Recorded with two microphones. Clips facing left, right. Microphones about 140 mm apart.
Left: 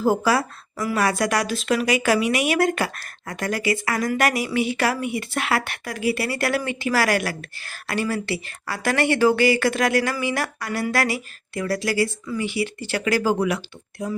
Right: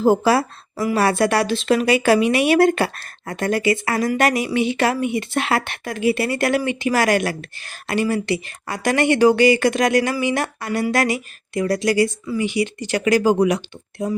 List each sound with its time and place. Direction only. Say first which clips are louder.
0.0 s a woman's voice: right 4 dB; 25° right (ahead or behind)